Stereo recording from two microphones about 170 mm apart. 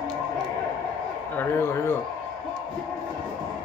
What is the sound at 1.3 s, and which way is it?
Speech, 15° left (ahead or behind).